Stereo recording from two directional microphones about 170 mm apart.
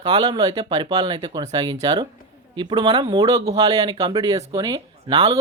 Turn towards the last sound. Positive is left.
turn(degrees=-25)  # may be behind; listen again after turning